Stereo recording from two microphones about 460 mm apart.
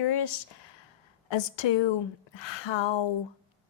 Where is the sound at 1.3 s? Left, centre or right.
Left.